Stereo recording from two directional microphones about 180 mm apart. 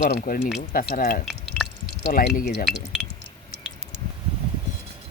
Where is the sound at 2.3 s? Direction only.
50° left (ahead or behind).